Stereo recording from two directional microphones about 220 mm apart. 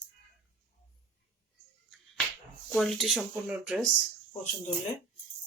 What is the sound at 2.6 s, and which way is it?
Speech, centre (ahead or behind).